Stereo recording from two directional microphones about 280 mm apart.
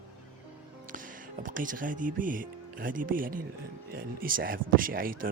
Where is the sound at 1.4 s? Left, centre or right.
Right.